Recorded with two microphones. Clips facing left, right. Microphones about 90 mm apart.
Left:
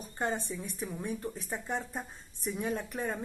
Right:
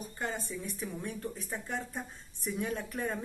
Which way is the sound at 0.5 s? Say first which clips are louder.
Left 1 dB; 20° left (ahead or behind).